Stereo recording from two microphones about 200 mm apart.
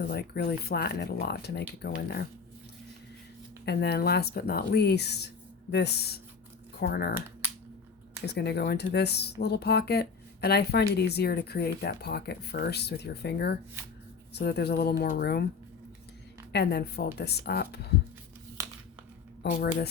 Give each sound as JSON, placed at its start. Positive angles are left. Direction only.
{"t": 0.0, "sound": "speech", "side_deg": 50}
{"t": 3.7, "sound": "speech", "side_deg": 55}
{"t": 8.3, "sound": "speech", "side_deg": 55}
{"t": 16.5, "sound": "speech", "side_deg": 55}
{"t": 19.4, "sound": "speech", "side_deg": 55}